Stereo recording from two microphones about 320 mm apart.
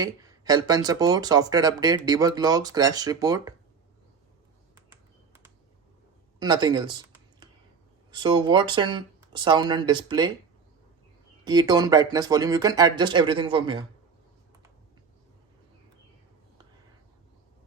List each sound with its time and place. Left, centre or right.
0.0 s speech: centre
6.4 s speech: centre
11.4 s speech: centre